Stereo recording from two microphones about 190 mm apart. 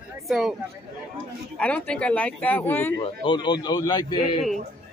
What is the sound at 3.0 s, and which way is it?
A man's voice, 25° left (ahead or behind).